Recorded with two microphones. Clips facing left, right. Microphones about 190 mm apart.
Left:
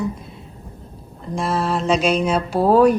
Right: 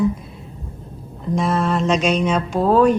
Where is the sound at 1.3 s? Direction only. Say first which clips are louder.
Right 2 dB; 5° left (ahead or behind).